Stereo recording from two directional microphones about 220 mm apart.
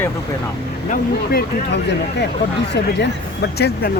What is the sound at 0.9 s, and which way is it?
Speech, 45° left (ahead or behind).